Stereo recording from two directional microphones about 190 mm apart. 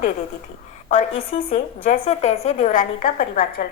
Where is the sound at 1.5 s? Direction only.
40° left (ahead or behind).